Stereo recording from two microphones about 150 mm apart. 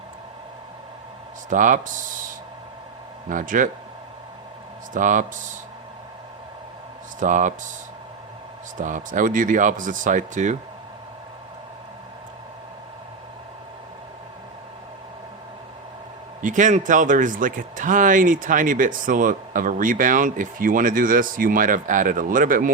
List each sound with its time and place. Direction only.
1.5 s speech: 60° right (ahead or behind)
3.2 s speech: 60° right (ahead or behind)
4.9 s speech: 60° right (ahead or behind)
7.2 s speech: 60° right (ahead or behind)
8.8 s speech: 55° right (ahead or behind)
16.4 s speech: 55° right (ahead or behind)